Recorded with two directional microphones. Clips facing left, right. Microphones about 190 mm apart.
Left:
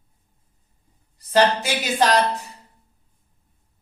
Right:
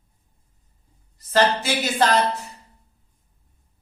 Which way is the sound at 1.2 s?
15° left (ahead or behind).